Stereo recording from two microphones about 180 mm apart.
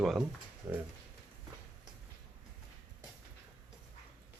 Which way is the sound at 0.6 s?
15° right (ahead or behind).